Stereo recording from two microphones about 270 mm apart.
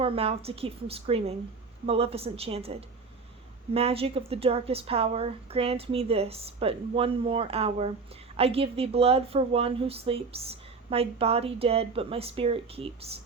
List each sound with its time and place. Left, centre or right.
0.0 s a woman's voice: right
3.8 s a woman's voice: right